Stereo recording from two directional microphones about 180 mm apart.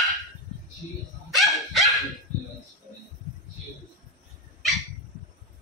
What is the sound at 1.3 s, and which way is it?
Dog, centre (ahead or behind).